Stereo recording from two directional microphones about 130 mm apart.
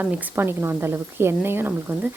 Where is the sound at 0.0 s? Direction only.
15° right (ahead or behind).